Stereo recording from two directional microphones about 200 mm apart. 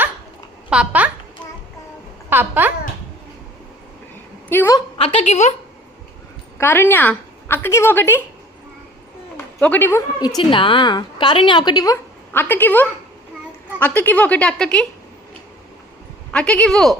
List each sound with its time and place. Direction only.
0.7 s a child's voice: 5° right (ahead or behind)
2.3 s speech: 10° right (ahead or behind)
4.4 s a sound: 10° left (ahead or behind)
4.9 s a woman's voice: 30° left (ahead or behind)
6.6 s a woman's voice: 10° left (ahead or behind)
9.6 s a woman's voice: 10° left (ahead or behind)
16.3 s speech: 5° left (ahead or behind)